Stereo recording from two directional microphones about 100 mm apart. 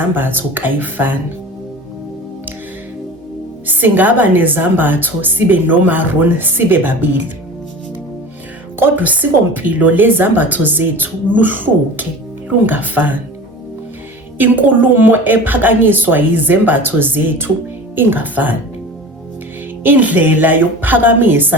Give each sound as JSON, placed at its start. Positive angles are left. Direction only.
{"t": 0.1, "sound": "a woman's voice", "side_deg": -20}
{"t": 3.7, "sound": "a woman's voice", "side_deg": -20}
{"t": 8.8, "sound": "a woman's voice", "side_deg": -15}
{"t": 14.3, "sound": "a woman's voice", "side_deg": -20}
{"t": 19.8, "sound": "a woman's voice", "side_deg": -15}